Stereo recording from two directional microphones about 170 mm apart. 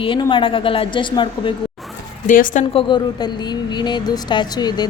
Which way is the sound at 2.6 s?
30° left (ahead or behind).